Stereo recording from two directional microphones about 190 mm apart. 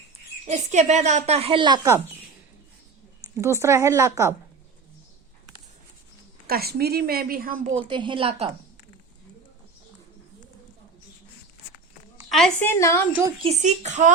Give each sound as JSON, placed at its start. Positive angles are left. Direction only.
{"t": 0.4, "sound": "speech", "side_deg": -40}
{"t": 3.3, "sound": "a woman's voice", "side_deg": -15}
{"t": 6.5, "sound": "a woman's voice", "side_deg": -55}
{"t": 7.9, "sound": "a woman's voice", "side_deg": -25}
{"t": 12.1, "sound": "a woman's voice", "side_deg": 0}
{"t": 13.4, "sound": "speech", "side_deg": -35}